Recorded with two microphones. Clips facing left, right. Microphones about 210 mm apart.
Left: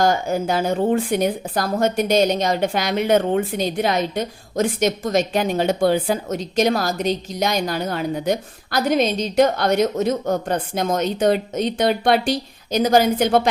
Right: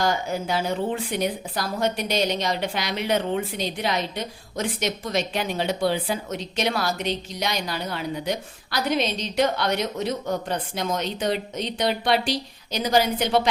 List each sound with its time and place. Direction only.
0.0 s speech: 45° left (ahead or behind)